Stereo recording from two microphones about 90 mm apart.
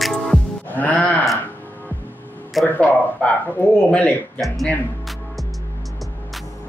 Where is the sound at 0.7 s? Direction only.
15° left (ahead or behind).